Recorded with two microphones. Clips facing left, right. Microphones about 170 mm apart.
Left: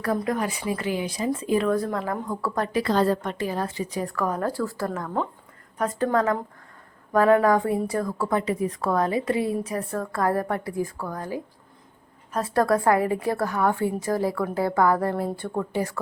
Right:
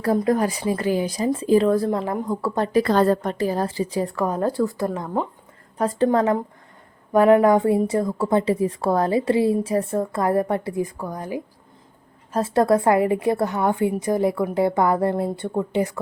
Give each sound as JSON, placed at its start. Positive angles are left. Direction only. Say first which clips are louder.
{"t": 0.0, "sound": "a woman's voice", "louder": "right 5 dB", "side_deg": -30}
{"t": 2.7, "sound": "a woman's voice", "louder": "right 5 dB", "side_deg": -50}
{"t": 3.2, "sound": "a woman's voice", "louder": "right 5 dB", "side_deg": -35}
{"t": 5.7, "sound": "a woman's voice", "louder": "right 4 dB", "side_deg": -30}
{"t": 12.3, "sound": "a woman's voice", "louder": "right 4 dB", "side_deg": -25}